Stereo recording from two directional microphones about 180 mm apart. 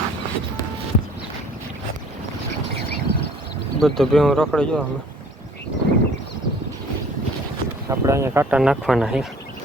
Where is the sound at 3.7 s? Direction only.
Centre (ahead or behind).